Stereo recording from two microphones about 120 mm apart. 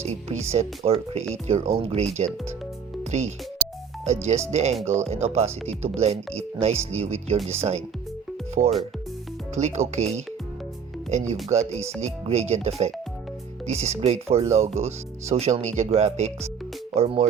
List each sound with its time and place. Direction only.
0.0 s speech: 65° right (ahead or behind)
3.0 s speech: 70° right (ahead or behind)
8.6 s speech: 90° right
9.6 s speech: 65° right (ahead or behind)